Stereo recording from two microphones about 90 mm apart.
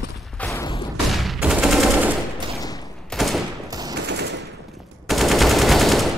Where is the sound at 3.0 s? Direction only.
Centre (ahead or behind).